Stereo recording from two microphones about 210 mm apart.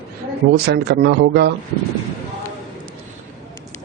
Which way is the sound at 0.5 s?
50° right (ahead or behind).